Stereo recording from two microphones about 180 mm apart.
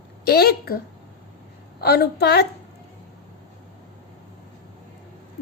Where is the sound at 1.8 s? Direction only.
60° left (ahead or behind).